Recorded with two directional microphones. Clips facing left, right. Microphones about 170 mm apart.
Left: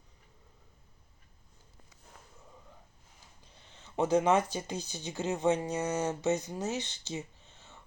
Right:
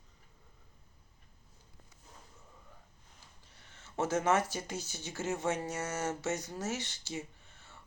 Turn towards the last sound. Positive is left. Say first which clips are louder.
# even
turn(degrees=20)  # may be behind; listen again after turning